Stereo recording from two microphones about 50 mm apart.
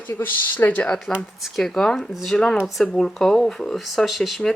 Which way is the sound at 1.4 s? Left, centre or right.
Centre.